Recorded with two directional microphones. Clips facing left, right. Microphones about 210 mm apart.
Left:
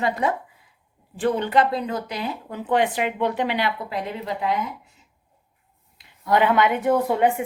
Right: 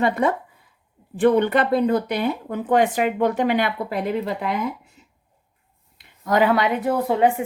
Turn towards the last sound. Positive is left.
turn(degrees=-30)  # may be behind; listen again after turning